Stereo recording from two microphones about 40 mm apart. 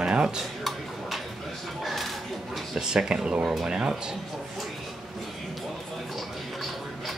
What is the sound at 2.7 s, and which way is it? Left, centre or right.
Speech, centre.